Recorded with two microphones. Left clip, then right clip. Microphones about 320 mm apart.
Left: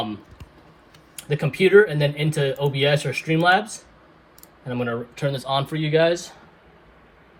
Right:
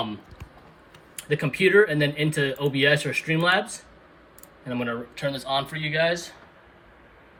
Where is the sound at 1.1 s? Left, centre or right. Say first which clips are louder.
Even; centre.